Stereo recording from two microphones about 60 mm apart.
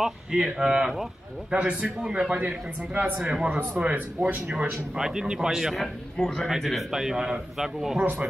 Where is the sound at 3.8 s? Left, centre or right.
Right.